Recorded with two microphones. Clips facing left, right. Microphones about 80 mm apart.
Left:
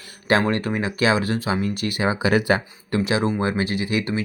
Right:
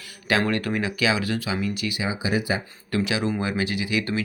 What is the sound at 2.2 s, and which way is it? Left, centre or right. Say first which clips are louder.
Speech: left 6 dB; left.